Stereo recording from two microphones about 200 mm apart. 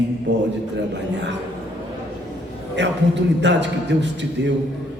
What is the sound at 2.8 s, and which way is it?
A man's voice, 60° right (ahead or behind).